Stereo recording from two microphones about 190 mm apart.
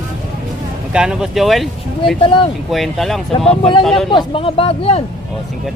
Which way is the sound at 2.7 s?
Centre (ahead or behind).